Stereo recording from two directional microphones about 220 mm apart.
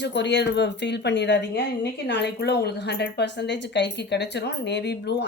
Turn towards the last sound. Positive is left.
turn(degrees=50)  # may be behind; listen again after turning